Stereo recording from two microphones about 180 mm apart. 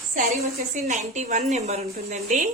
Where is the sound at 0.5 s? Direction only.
40° right (ahead or behind).